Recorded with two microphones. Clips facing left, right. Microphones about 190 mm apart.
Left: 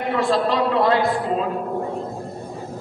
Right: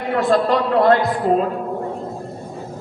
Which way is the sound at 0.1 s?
50° right (ahead or behind).